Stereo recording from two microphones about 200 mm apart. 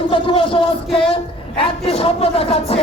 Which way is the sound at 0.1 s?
25° left (ahead or behind).